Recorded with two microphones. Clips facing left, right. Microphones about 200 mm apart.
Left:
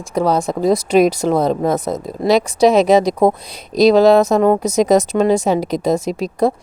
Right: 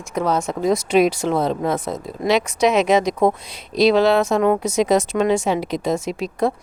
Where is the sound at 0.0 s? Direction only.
35° left (ahead or behind).